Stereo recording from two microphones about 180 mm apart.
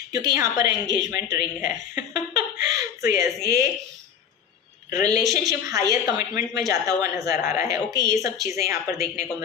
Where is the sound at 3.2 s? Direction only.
15° right (ahead or behind).